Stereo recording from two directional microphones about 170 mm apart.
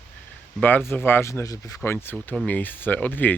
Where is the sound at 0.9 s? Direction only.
10° left (ahead or behind).